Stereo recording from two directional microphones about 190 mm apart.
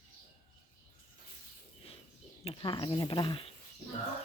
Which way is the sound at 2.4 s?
25° left (ahead or behind).